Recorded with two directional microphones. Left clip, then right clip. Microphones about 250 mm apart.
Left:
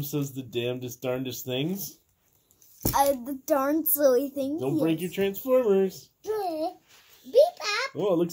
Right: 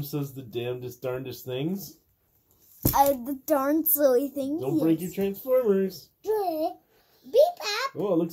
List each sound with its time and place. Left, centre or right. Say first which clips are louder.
0.0 s speech: left 2 dB; left
2.9 s a child's voice: right 2 dB; centre
5.1 s speech: left 1 dB; left
6.2 s a sound: right 3 dB; centre
8.0 s speech: left 1 dB; left